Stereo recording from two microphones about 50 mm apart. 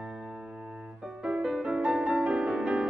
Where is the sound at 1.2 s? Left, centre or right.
Centre.